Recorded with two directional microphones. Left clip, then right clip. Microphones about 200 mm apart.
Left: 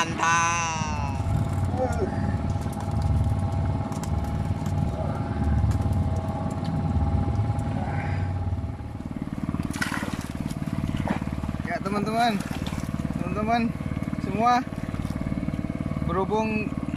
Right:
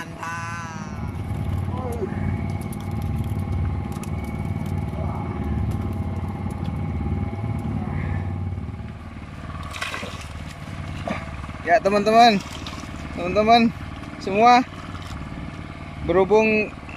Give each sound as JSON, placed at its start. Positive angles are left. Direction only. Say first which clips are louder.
{"t": 0.0, "sound": "music", "louder": "left 9 dB", "side_deg": 10}
{"t": 11.7, "sound": "speech", "louder": "right 12 dB", "side_deg": -10}
{"t": 16.1, "sound": "speech", "louder": "right 9 dB", "side_deg": 0}